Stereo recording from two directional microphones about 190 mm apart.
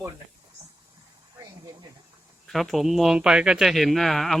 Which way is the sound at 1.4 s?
15° right (ahead or behind).